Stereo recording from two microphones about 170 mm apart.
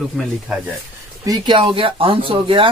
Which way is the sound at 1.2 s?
25° right (ahead or behind).